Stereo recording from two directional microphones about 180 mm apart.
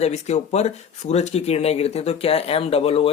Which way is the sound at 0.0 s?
40° left (ahead or behind).